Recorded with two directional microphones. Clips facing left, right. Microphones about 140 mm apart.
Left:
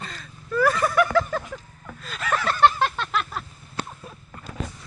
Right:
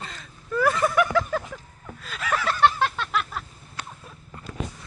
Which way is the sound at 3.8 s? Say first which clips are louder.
Left 6 dB; 30° left (ahead or behind).